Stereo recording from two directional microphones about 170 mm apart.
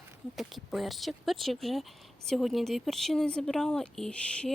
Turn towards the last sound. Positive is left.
turn(degrees=5)  # may be behind; listen again after turning